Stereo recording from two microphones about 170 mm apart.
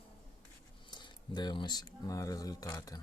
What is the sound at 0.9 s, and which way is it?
Speech, 25° left (ahead or behind).